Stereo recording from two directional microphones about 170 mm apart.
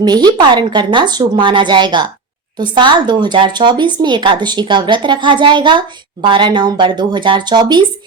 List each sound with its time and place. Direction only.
0.0 s speech: 25° right (ahead or behind)